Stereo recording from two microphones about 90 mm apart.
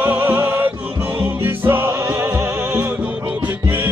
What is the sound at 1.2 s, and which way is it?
Music, 25° right (ahead or behind).